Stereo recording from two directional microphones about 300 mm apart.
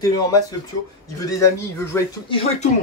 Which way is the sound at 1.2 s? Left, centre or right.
Centre.